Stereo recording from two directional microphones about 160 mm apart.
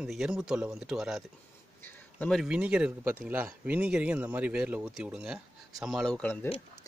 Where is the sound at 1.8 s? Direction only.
10° left (ahead or behind).